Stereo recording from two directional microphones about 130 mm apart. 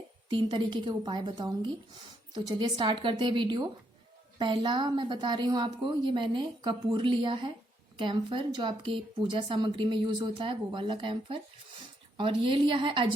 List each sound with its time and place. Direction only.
0.3 s speech: 40° right (ahead or behind)